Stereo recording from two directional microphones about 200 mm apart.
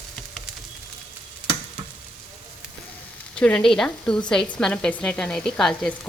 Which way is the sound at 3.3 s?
5° left (ahead or behind).